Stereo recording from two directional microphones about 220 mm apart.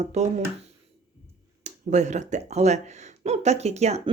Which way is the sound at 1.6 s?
30° right (ahead or behind).